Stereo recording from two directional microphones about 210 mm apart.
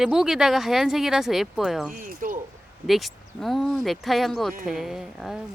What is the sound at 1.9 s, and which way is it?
Speech, 40° right (ahead or behind).